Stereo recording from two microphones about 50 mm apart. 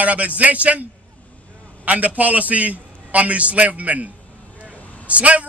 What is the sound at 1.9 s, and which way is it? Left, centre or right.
A man's voice, right.